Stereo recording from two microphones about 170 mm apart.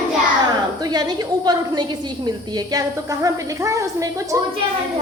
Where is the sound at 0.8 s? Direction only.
25° right (ahead or behind).